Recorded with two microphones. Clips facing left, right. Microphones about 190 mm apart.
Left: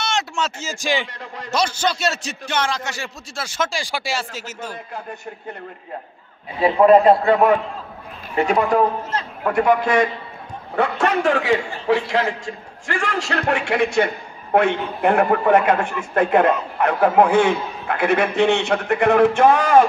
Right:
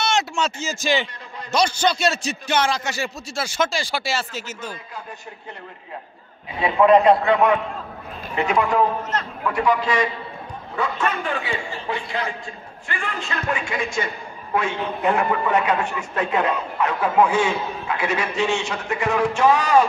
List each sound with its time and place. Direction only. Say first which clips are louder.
0.4 s a man's voice: right 1 dB; 5° left (ahead or behind)
3.7 s speech: even; 10° left (ahead or behind)
6.6 s a man's voice: left 3 dB; 35° left (ahead or behind)
9.4 s a man's voice: left 4 dB; 50° left (ahead or behind)
10.8 s a man's voice: left 5 dB; 75° left (ahead or behind); by 19.9 s 55° left (ahead or behind)